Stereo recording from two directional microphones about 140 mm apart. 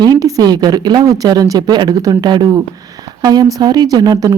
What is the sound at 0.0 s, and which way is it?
Speech, 25° right (ahead or behind).